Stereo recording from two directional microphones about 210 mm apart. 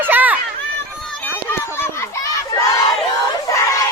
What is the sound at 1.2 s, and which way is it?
Crowd, 10° left (ahead or behind).